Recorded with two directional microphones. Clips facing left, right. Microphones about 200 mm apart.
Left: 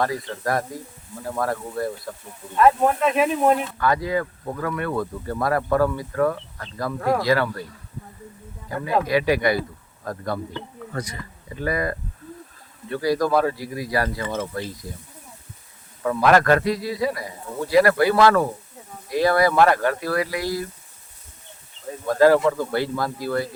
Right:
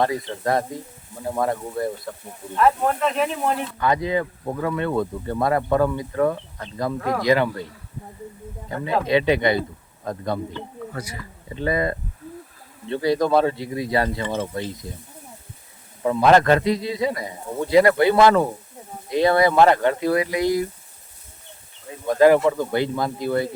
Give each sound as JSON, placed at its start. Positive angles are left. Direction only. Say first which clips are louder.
{"t": 0.0, "sound": "speech", "louder": "right 2 dB", "side_deg": -25}
{"t": 2.6, "sound": "speech", "louder": "left 2 dB", "side_deg": 0}
{"t": 3.8, "sound": "speech", "louder": "right 1 dB", "side_deg": -20}
{"t": 9.0, "sound": "speech", "louder": "right 3 dB", "side_deg": -25}
{"t": 10.9, "sound": "speech", "louder": "left 6 dB", "side_deg": -5}
{"t": 11.4, "sound": "speech", "louder": "right 2 dB", "side_deg": -25}
{"t": 16.0, "sound": "speech", "louder": "right 2 dB", "side_deg": -25}
{"t": 22.0, "sound": "speech", "louder": "right 1 dB", "side_deg": -20}